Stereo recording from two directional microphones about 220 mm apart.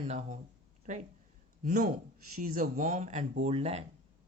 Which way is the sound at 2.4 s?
35° right (ahead or behind).